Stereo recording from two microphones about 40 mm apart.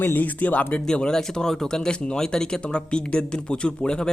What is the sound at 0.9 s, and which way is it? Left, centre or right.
Speech, centre.